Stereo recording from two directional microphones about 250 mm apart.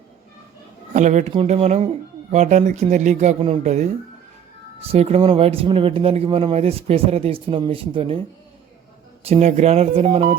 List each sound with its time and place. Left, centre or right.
0.9 s speech: right
9.2 s speech: right